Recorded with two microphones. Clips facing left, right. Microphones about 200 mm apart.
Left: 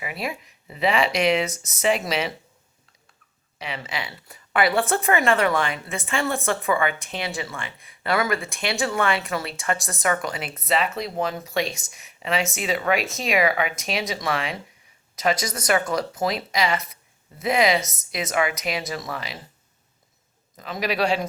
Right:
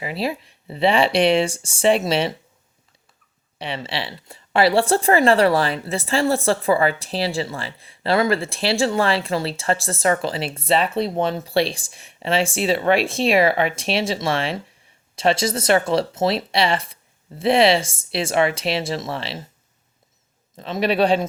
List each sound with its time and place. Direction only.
0.0 s a woman's voice: 30° right (ahead or behind)
3.6 s a woman's voice: 30° right (ahead or behind)
20.6 s speech: 30° right (ahead or behind)